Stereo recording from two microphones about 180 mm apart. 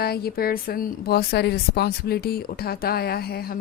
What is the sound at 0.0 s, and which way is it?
A woman's voice, 60° left (ahead or behind).